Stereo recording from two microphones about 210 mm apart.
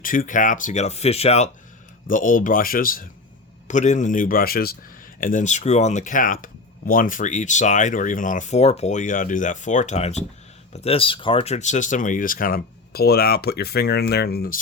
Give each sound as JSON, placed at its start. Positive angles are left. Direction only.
{"t": 0.0, "sound": "speech", "side_deg": 40}
{"t": 2.0, "sound": "speech", "side_deg": 40}